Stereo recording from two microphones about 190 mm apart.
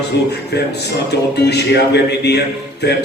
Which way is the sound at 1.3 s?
60° left (ahead or behind).